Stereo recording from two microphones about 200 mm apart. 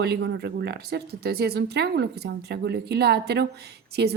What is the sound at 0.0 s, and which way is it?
Speech, 55° right (ahead or behind).